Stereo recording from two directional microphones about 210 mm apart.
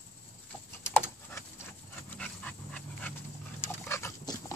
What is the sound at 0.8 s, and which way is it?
Typing, 10° left (ahead or behind).